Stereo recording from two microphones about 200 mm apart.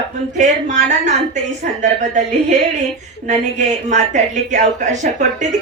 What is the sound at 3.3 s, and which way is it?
Speech, 35° right (ahead or behind).